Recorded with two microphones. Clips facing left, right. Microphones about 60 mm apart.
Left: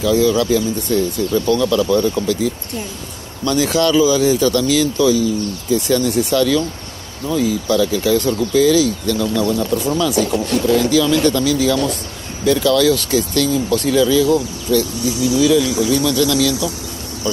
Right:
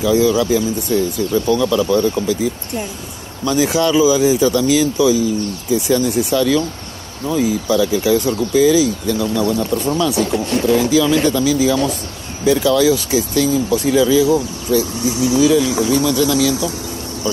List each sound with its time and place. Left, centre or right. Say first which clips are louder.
0.0 s speech: right 1 dB; centre
5.9 s speech: right 1 dB; centre
9.8 s speech: right 2 dB; centre
10.3 s speech: even; right
10.9 s speech: even; centre